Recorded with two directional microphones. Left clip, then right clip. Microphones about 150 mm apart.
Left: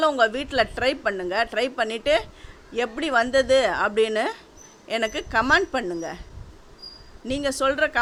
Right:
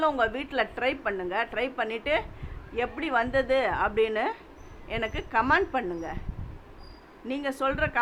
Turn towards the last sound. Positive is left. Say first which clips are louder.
# left 6 dB
turn(degrees=40)  # may be behind; listen again after turning